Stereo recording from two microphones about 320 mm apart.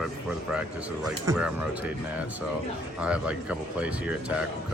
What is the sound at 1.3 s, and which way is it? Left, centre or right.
Speech, centre.